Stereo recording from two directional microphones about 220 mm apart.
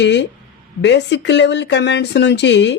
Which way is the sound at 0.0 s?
50° left (ahead or behind).